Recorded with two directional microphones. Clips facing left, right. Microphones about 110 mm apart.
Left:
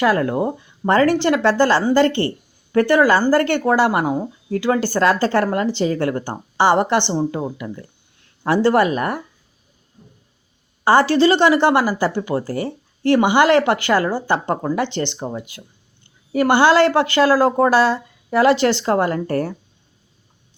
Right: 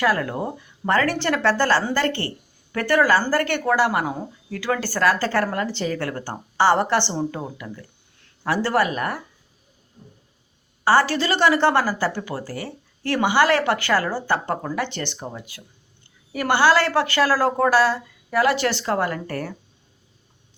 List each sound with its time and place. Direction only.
0.0 s speech: 30° left (ahead or behind)
10.8 s speech: 20° left (ahead or behind)